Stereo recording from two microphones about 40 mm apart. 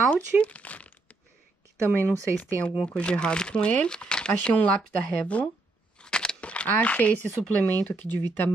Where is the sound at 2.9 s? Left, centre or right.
Left.